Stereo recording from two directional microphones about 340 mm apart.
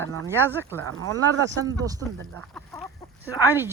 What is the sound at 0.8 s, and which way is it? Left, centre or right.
Speech, right.